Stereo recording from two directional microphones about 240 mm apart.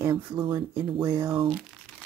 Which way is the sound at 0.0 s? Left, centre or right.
Centre.